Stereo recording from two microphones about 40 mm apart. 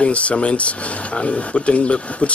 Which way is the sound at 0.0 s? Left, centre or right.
Left.